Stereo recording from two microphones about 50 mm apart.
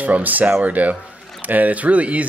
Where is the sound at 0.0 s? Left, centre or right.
Right.